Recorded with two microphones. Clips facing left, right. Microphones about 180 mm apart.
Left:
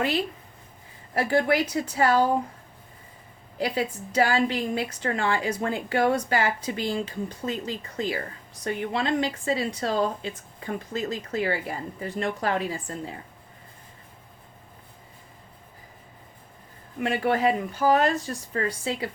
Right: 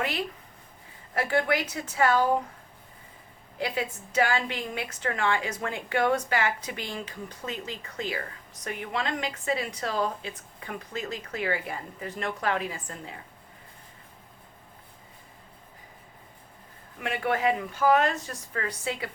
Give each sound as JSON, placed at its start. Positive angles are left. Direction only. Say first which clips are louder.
{"t": 1.1, "sound": "a woman's voice", "louder": "left 3 dB", "side_deg": 30}
{"t": 3.6, "sound": "a woman's voice", "louder": "left 4 dB", "side_deg": 35}
{"t": 17.0, "sound": "a woman's voice", "louder": "left 4 dB", "side_deg": 35}